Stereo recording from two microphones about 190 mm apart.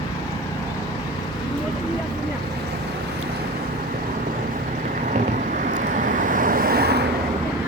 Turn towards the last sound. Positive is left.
turn(degrees=-55)  # may be behind; listen again after turning